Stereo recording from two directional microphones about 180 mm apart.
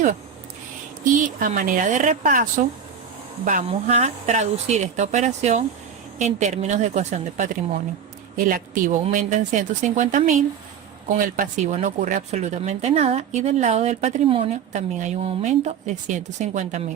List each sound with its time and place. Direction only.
1.1 s speech: 45° right (ahead or behind)